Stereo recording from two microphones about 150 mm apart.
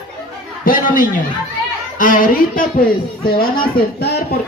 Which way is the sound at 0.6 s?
65° left (ahead or behind).